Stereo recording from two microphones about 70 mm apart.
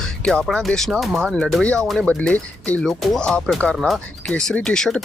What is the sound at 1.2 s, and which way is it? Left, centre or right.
Speech, centre.